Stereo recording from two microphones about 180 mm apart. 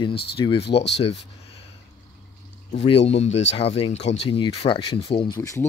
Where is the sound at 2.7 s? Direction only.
30° left (ahead or behind).